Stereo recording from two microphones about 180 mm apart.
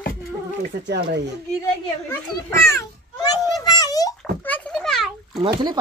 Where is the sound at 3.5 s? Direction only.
20° left (ahead or behind).